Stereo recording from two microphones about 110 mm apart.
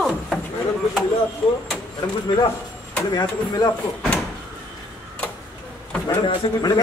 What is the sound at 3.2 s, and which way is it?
Speech, 35° left (ahead or behind).